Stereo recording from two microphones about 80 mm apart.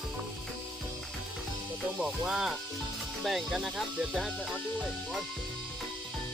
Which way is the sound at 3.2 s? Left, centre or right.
Centre.